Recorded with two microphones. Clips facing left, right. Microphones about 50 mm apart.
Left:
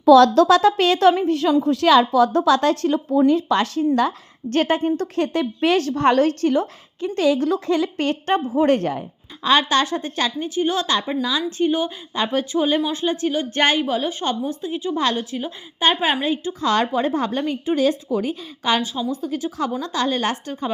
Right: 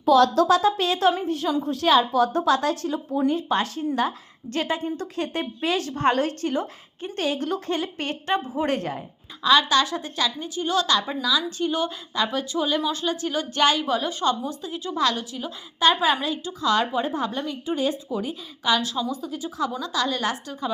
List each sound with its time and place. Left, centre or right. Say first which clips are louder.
0.2 s speech: left 5 dB; left
1.3 s a woman's voice: left 6 dB; left
1.6 s a woman's voice: left 3 dB; left
3.9 s a woman's voice: left 5 dB; left
5.1 s a woman's voice: left 6 dB; left
10.6 s a woman's voice: left 1 dB; left
12.2 s a woman's voice: left 4 dB; left
13.8 s a woman's voice: left 2 dB; centre
14.1 s a woman's voice: left 1 dB; left
16.6 s a woman's voice: left 3 dB; left
17.7 s speech: left 6 dB; left
18.8 s a woman's voice: left 2 dB; left
19.2 s a woman's voice: left 4 dB; left
19.8 s a woman's voice: left 4 dB; left